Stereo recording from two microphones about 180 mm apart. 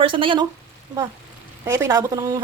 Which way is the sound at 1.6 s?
15° right (ahead or behind).